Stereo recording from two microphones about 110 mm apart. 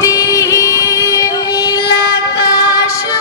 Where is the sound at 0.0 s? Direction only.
30° left (ahead or behind).